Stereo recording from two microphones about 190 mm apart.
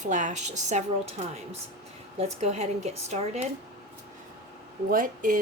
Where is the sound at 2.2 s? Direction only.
35° right (ahead or behind).